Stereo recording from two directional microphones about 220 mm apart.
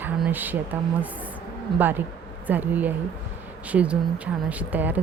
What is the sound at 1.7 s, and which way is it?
Speech, 10° right (ahead or behind).